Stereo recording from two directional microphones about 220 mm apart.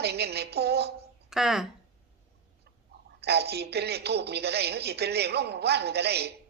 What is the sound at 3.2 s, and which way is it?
Speech, 45° right (ahead or behind).